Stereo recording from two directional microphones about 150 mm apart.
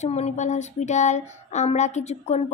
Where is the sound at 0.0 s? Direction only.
45° left (ahead or behind).